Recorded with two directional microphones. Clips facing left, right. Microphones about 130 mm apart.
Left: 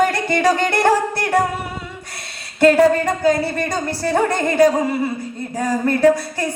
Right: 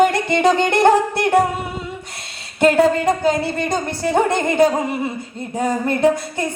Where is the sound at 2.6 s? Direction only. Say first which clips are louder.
Left 1 dB; 20° right (ahead or behind).